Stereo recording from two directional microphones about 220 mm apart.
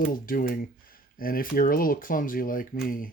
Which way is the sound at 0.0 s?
40° left (ahead or behind).